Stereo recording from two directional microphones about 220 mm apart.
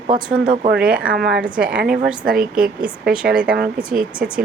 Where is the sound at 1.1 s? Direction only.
50° right (ahead or behind).